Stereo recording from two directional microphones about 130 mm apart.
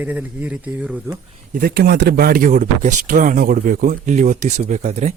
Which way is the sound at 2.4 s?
85° right.